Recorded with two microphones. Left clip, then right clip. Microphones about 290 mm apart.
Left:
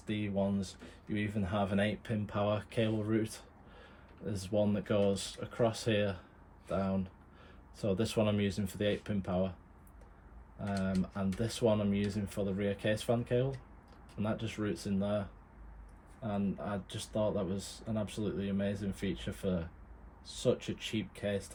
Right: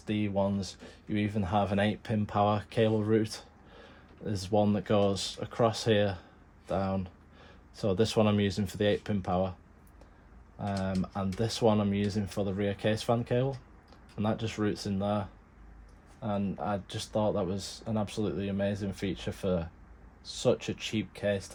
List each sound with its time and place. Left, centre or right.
0.0 s speech: right
10.7 s speech: right
16.2 s speech: right